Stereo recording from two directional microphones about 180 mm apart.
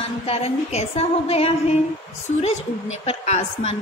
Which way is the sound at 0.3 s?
35° left (ahead or behind).